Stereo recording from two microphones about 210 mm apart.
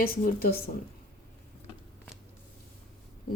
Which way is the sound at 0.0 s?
45° left (ahead or behind).